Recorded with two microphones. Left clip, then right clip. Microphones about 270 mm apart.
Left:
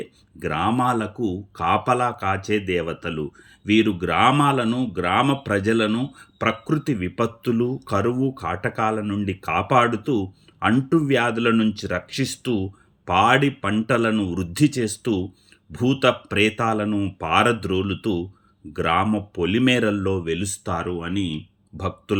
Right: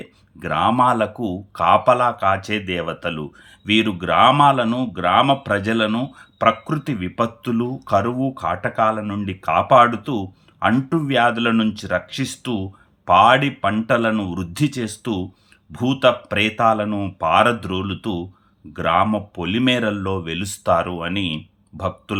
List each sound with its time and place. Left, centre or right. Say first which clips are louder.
0.3 s speech: right 5 dB; centre
0.9 s speech: right 5 dB; right
1.5 s speech: right 6 dB; centre
20.7 s speech: right 9 dB; right
21.2 s speech: right 5 dB; centre